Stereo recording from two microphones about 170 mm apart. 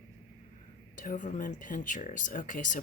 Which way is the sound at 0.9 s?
50° left (ahead or behind).